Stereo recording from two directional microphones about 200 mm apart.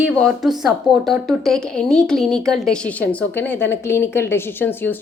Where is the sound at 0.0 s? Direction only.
Centre (ahead or behind).